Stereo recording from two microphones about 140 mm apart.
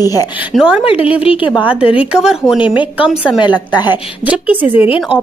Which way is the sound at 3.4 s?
30° left (ahead or behind).